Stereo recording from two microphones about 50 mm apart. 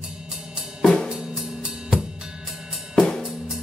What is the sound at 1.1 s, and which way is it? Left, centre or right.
Drum kit, centre.